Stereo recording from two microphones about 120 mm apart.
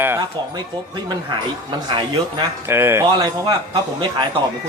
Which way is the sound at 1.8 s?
40° right (ahead or behind).